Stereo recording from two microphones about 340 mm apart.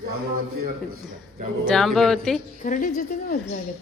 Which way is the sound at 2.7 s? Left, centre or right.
Left.